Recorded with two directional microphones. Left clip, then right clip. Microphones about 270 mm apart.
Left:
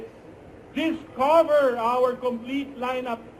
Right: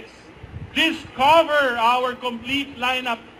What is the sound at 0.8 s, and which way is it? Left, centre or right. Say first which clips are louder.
A man's voice: right 5 dB; centre.